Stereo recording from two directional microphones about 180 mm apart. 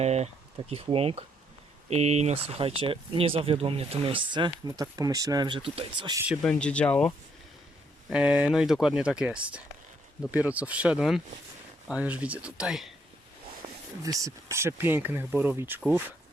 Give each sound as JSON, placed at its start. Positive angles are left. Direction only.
{"t": 0.0, "sound": "speech", "side_deg": -35}
{"t": 6.4, "sound": "speech", "side_deg": 5}
{"t": 8.1, "sound": "speech", "side_deg": -5}
{"t": 14.0, "sound": "speech", "side_deg": -20}